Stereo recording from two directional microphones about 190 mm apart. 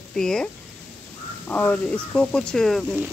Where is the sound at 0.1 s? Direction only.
5° left (ahead or behind).